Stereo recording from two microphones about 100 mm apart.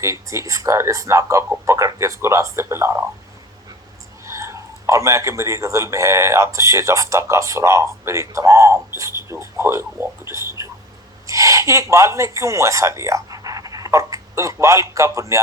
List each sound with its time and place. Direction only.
0.0 s a man's voice: 30° right (ahead or behind)
4.3 s a man's voice: 30° right (ahead or behind)